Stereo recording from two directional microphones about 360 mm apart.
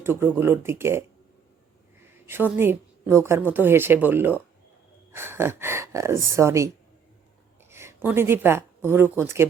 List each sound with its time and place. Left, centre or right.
0.0 s speech: centre
2.2 s a woman's voice: centre